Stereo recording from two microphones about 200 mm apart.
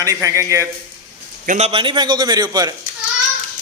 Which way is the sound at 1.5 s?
35° right (ahead or behind).